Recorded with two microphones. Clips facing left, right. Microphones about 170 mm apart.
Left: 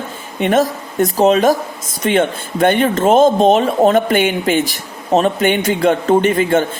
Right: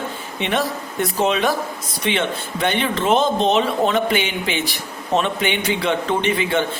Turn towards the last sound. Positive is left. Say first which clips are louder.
# left 6 dB
turn(degrees=45)  # may be behind; listen again after turning